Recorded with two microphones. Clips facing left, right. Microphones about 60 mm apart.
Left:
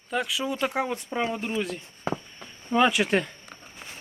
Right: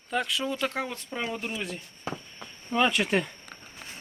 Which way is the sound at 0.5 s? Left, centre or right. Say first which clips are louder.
Left 4 dB; centre.